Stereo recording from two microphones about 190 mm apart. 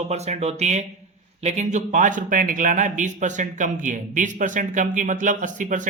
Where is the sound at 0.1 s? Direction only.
35° right (ahead or behind).